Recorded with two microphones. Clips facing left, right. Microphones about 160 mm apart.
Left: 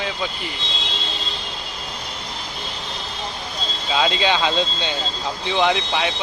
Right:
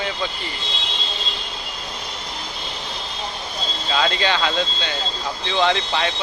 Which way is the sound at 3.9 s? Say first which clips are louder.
Left 1 dB; 15° left (ahead or behind).